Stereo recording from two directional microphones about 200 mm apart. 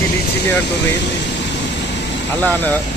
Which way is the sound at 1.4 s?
60° left (ahead or behind).